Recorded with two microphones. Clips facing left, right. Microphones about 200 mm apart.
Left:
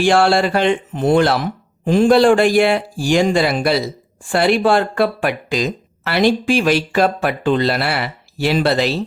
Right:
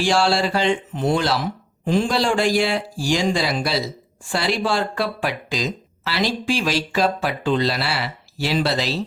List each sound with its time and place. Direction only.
0.0 s a man's voice: 55° left (ahead or behind)